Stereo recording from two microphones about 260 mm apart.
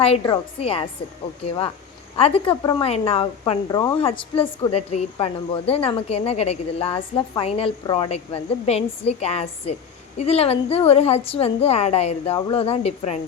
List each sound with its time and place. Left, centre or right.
0.0 s a woman's voice: left
2.1 s a woman's voice: left